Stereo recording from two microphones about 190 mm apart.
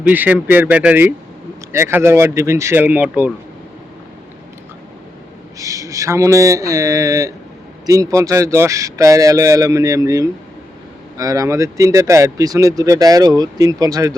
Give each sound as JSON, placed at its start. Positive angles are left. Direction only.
{"t": 0.0, "sound": "speech", "side_deg": -10}
{"t": 5.5, "sound": "speech", "side_deg": -15}